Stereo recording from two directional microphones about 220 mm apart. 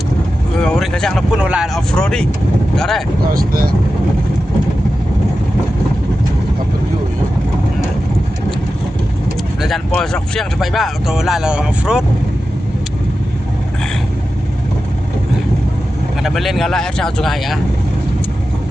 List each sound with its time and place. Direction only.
0.6 s speech: 5° left (ahead or behind)
3.3 s speech: 40° right (ahead or behind)
9.6 s speech: centre (ahead or behind)
16.2 s speech: centre (ahead or behind)